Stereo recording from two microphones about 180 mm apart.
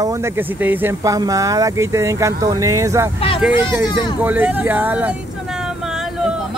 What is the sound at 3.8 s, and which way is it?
Speech, 25° left (ahead or behind).